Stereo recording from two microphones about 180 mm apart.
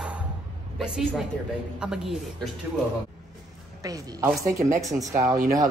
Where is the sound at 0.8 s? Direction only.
Centre (ahead or behind).